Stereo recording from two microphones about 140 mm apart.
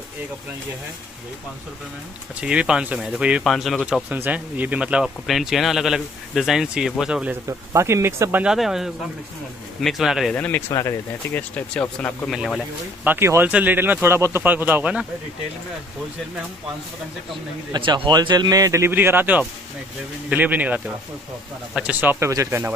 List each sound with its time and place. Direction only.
2.4 s speech: 5° right (ahead or behind)
7.4 s speech: 20° right (ahead or behind); by 10.3 s centre (ahead or behind)
10.3 s speech: 10° left (ahead or behind)
10.7 s speech: 20° left (ahead or behind)
11.5 s speech: 10° left (ahead or behind)
13.0 s speech: 15° right (ahead or behind)
17.7 s speech: 35° right (ahead or behind); by 22.7 s 20° right (ahead or behind)